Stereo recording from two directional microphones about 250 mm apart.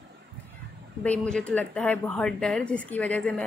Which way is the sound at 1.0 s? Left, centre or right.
Centre.